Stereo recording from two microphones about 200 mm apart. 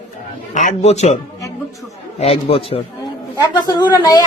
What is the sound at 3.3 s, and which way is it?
Speech, 15° left (ahead or behind).